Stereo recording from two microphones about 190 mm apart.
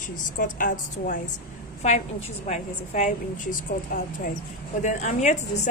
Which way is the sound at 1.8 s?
35° left (ahead or behind).